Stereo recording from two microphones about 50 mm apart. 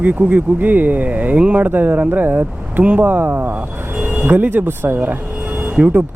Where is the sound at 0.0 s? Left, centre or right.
Right.